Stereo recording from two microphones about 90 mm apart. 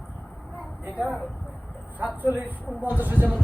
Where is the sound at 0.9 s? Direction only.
15° right (ahead or behind).